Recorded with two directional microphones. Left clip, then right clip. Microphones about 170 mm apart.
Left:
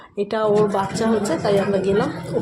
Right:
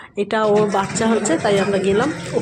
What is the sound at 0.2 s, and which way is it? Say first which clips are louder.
Speech: right 2 dB; 15° right (ahead or behind).